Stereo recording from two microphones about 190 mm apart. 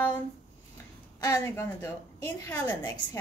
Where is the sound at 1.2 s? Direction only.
15° left (ahead or behind).